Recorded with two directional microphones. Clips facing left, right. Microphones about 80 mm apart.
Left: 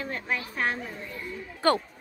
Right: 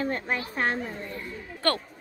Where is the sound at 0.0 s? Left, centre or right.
Right.